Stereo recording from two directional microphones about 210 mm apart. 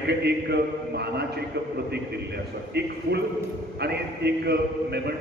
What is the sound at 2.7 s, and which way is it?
A man's voice, 50° right (ahead or behind).